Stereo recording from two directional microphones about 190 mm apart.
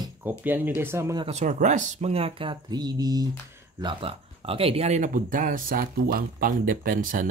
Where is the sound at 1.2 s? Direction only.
40° right (ahead or behind).